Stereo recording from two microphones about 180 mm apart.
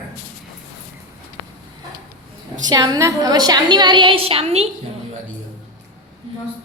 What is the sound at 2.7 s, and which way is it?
A woman's voice, 20° right (ahead or behind).